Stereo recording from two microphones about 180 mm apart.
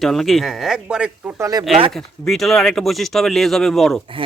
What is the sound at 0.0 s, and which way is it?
Speech, centre (ahead or behind).